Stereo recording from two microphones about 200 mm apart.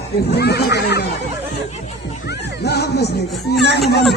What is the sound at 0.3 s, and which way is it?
Speech, 55° left (ahead or behind).